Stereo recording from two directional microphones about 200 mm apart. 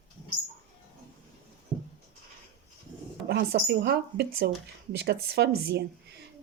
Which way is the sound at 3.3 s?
50° right (ahead or behind).